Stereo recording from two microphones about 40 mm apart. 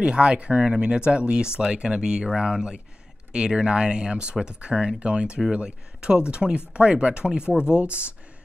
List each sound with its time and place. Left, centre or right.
0.0 s speech: right